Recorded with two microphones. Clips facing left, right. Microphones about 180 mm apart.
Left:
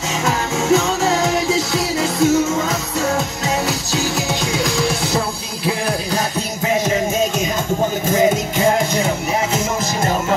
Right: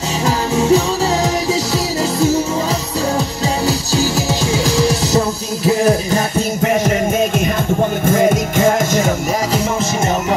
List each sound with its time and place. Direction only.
0.2 s music: 35° right (ahead or behind)
3.6 s music: 35° right (ahead or behind)
5.9 s music: 55° right (ahead or behind)
8.0 s music: 55° right (ahead or behind)